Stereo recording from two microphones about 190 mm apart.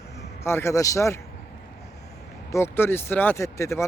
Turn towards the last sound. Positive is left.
turn(degrees=15)  # may be behind; listen again after turning